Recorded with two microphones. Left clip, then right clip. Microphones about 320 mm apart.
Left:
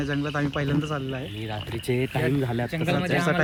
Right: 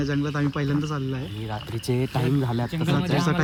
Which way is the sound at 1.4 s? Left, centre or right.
Centre.